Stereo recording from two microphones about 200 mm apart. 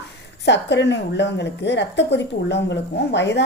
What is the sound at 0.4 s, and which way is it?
A woman's voice, 60° left (ahead or behind).